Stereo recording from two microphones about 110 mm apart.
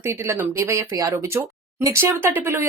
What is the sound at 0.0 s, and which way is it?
Speech, 20° right (ahead or behind).